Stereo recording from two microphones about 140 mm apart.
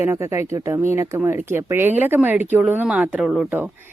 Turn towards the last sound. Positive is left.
turn(degrees=-10)  # may be behind; listen again after turning